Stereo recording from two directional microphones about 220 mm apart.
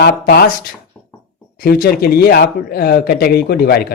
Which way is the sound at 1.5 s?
45° left (ahead or behind).